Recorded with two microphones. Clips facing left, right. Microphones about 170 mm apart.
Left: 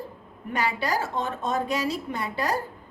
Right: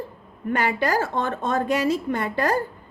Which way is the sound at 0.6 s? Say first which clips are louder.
Right 3 dB; 55° right (ahead or behind).